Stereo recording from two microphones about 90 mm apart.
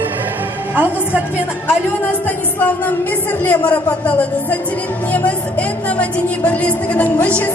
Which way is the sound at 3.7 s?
15° left (ahead or behind).